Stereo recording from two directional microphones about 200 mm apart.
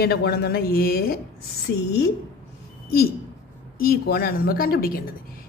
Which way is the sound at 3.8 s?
50° left (ahead or behind).